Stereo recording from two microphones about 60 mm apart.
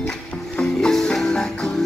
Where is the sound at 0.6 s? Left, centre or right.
Centre.